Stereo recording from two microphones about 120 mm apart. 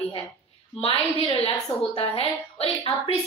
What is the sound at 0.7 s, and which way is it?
A woman's voice, 50° left (ahead or behind).